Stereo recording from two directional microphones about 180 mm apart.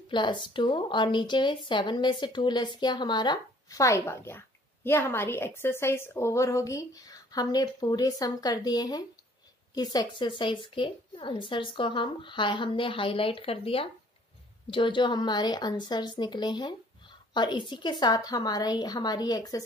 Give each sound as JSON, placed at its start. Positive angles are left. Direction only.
{"t": 0.1, "sound": "speech", "side_deg": 25}